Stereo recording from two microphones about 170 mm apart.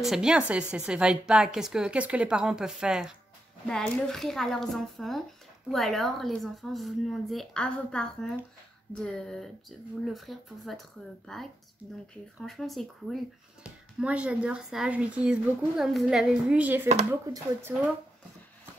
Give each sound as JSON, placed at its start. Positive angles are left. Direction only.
{"t": 0.0, "sound": "a woman's voice", "side_deg": -5}